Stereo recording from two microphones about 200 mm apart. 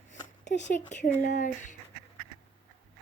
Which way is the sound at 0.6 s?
40° left (ahead or behind).